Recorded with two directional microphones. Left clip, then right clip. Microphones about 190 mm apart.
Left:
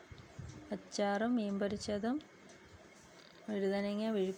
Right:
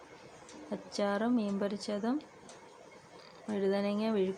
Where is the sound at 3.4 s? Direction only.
10° left (ahead or behind).